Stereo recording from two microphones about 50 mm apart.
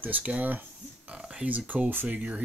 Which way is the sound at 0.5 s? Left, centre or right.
Right.